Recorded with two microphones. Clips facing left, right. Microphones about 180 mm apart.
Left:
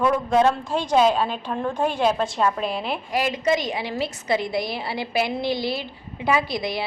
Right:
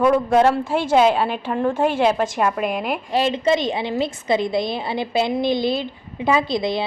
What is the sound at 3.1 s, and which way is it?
A woman's voice, 25° right (ahead or behind).